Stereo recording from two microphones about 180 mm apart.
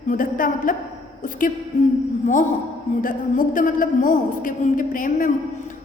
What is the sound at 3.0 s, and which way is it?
A man's voice, 50° left (ahead or behind).